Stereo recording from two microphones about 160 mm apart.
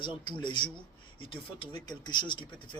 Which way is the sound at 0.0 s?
30° left (ahead or behind).